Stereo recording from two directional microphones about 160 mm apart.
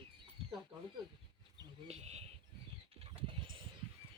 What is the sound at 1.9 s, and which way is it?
Bird, 40° right (ahead or behind).